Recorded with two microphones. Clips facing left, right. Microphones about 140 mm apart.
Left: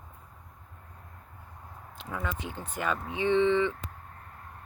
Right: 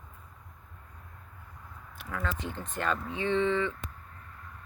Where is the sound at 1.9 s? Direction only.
20° left (ahead or behind).